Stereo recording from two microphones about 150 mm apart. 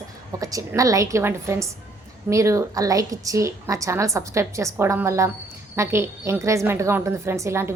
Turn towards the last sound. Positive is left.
turn(degrees=-15)  # may be behind; listen again after turning